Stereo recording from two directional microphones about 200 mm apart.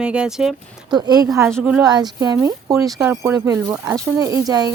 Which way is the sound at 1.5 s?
Centre (ahead or behind).